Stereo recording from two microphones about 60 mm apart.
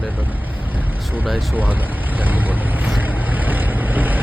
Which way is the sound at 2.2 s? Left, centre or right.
Right.